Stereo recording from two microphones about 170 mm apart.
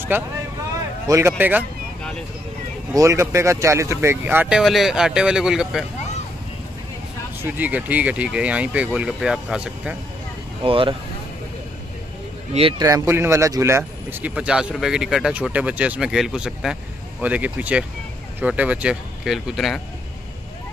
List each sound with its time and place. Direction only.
0.1 s speech: 15° right (ahead or behind)
2.9 s speech: 20° right (ahead or behind)
7.4 s speech: 10° right (ahead or behind)
10.6 s speech: 30° right (ahead or behind)
12.5 s speech: 35° right (ahead or behind)
12.8 s speech: 15° right (ahead or behind); by 19.8 s centre (ahead or behind)